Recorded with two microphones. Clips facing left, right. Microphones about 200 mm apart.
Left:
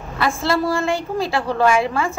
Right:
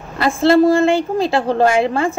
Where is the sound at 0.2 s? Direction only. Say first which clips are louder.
Right 8 dB; 25° right (ahead or behind).